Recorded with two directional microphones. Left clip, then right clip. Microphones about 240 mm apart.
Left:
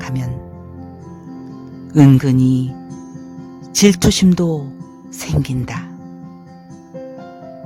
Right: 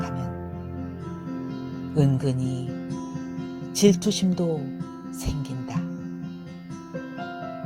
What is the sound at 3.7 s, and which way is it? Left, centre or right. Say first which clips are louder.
Speech: left 7 dB; left.